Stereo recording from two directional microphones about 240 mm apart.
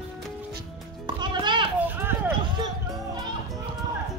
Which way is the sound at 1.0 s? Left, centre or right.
Centre.